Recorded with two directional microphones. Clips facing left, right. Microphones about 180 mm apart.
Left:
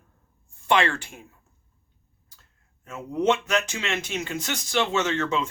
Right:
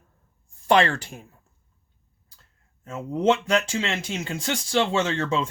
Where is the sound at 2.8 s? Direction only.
30° right (ahead or behind).